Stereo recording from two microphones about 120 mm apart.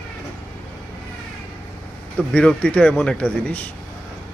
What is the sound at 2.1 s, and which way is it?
A man's voice, 10° left (ahead or behind).